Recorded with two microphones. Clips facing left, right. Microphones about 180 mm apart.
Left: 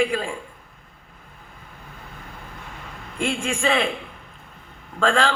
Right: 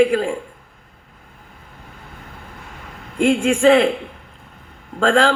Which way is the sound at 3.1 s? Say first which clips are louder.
Right 9 dB; 70° right (ahead or behind).